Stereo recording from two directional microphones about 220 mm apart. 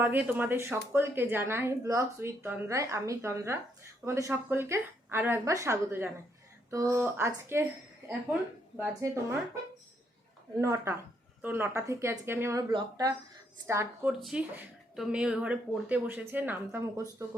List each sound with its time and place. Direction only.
0.0 s a woman's voice: 10° right (ahead or behind)
10.6 s a woman's voice: 10° right (ahead or behind)
14.1 s a woman's voice: centre (ahead or behind)